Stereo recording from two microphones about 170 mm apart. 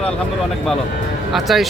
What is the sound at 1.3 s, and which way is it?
Speech, centre (ahead or behind).